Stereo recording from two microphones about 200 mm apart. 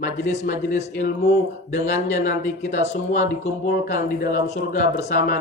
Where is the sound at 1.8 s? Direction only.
35° left (ahead or behind).